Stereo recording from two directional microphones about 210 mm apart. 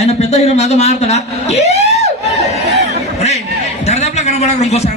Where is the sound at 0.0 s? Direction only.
30° left (ahead or behind).